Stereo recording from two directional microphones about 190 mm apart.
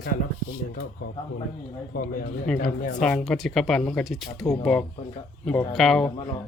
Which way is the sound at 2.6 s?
40° left (ahead or behind).